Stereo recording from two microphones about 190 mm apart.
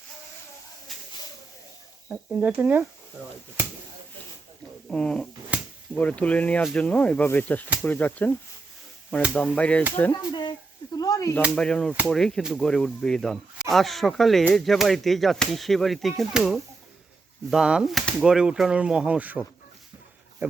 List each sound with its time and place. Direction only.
0.9 s snake: centre (ahead or behind)
2.0 s speech: 5° right (ahead or behind)
4.9 s speech: 5° left (ahead or behind)
10.9 s a sound: 20° left (ahead or behind)
11.5 s speech: 5° left (ahead or behind); by 20.6 s 10° right (ahead or behind)